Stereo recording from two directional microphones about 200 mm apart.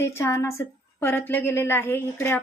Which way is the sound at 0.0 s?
15° left (ahead or behind).